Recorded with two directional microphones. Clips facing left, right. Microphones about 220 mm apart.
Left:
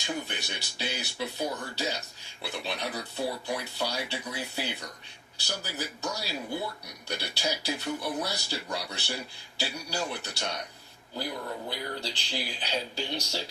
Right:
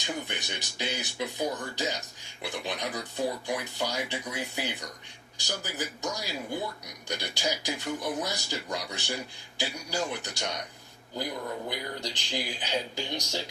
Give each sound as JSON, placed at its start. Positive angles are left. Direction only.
{"t": 0.3, "sound": "speech", "side_deg": -15}
{"t": 11.7, "sound": "speech", "side_deg": -15}